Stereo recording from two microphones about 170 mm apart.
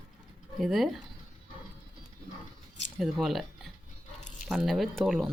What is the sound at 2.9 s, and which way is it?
Speech, centre (ahead or behind).